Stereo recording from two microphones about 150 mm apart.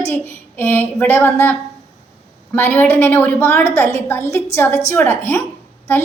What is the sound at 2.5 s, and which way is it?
A woman's voice, 15° left (ahead or behind).